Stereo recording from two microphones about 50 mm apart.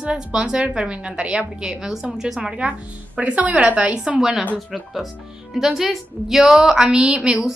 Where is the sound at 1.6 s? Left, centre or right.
Centre.